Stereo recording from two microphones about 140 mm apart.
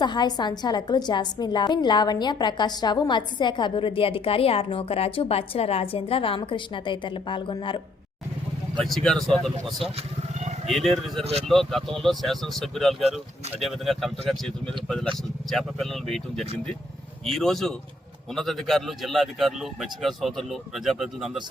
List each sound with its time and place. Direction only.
0.0 s a woman's voice: 30° left (ahead or behind)
8.8 s speech: centre (ahead or behind)
11.2 s speech: 45° right (ahead or behind)
11.4 s speech: centre (ahead or behind)